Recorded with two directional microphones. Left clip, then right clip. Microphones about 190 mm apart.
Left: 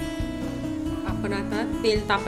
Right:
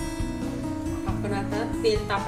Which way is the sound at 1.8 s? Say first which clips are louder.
Left 2 dB; 65° left (ahead or behind).